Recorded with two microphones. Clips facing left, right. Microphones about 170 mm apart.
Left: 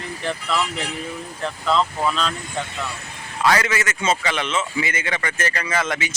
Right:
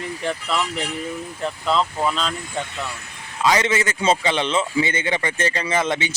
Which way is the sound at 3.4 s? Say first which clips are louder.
Right 1 dB; 20° right (ahead or behind).